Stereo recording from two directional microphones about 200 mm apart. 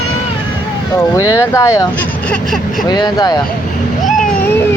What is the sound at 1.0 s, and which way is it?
Speech, 15° left (ahead or behind).